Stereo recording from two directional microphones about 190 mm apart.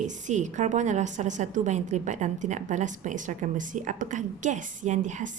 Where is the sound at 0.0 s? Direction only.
40° right (ahead or behind).